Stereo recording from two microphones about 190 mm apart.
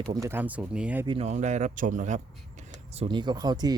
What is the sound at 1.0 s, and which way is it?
Speech, 35° right (ahead or behind).